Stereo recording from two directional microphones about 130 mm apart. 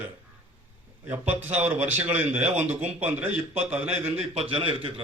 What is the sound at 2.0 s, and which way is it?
Speech, 15° right (ahead or behind).